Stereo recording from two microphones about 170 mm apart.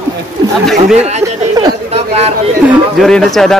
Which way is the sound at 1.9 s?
40° right (ahead or behind).